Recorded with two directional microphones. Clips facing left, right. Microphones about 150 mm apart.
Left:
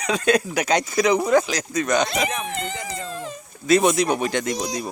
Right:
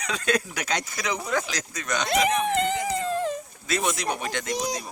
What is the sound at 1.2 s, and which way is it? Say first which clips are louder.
Speech: left 10 dB; 35° left (ahead or behind).